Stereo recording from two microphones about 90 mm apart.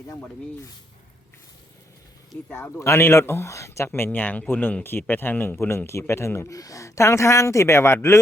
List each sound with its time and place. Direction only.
2.5 s speech: 25° left (ahead or behind)